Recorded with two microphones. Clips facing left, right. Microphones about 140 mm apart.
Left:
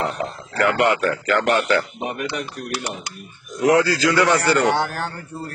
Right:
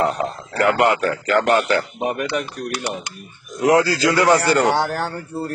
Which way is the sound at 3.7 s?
30° right (ahead or behind).